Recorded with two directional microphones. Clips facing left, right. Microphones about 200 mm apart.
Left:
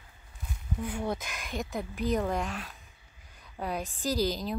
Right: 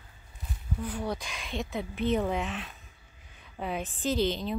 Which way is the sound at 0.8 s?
10° left (ahead or behind).